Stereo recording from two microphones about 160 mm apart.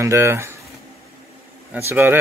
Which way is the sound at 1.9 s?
15° right (ahead or behind).